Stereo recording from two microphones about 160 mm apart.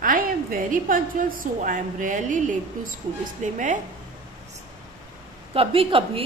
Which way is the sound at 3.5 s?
55° right (ahead or behind).